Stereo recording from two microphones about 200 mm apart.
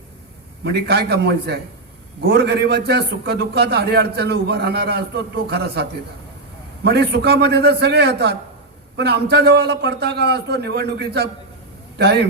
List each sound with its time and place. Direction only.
0.6 s a man's voice: 55° right (ahead or behind)
6.8 s a man's voice: 55° right (ahead or behind)